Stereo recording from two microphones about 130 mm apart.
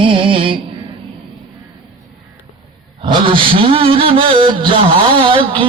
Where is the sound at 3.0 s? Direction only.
40° right (ahead or behind).